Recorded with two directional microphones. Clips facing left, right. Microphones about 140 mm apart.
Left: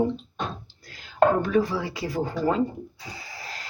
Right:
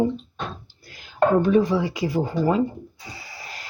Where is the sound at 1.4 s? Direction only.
20° right (ahead or behind).